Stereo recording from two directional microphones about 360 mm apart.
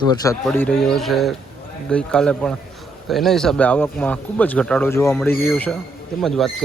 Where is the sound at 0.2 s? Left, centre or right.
Centre.